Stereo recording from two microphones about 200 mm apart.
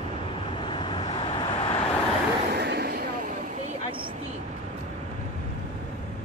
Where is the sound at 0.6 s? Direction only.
25° left (ahead or behind).